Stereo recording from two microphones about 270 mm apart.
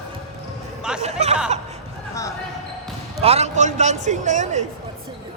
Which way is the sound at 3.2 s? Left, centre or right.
Right.